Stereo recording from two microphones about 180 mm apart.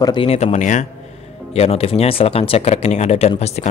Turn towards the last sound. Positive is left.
turn(degrees=35)  # may be behind; listen again after turning